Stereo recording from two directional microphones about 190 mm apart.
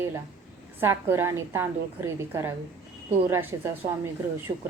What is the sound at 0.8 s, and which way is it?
A woman's voice, 10° right (ahead or behind).